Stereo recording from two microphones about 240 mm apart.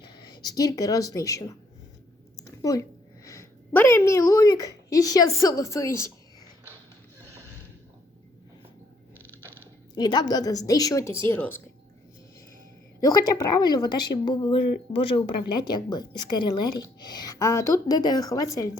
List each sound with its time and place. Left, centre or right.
0.1 s speech: centre
2.4 s a sound: centre
3.2 s speech: centre
9.9 s speech: centre
13.0 s speech: centre